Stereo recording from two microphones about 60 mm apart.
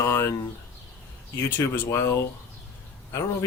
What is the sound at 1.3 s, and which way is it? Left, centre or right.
Speech, left.